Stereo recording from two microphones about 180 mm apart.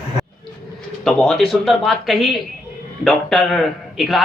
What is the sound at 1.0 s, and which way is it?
Speech, 5° left (ahead or behind).